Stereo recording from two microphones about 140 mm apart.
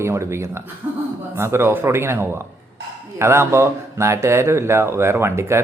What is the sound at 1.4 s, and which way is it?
Speech, 20° right (ahead or behind).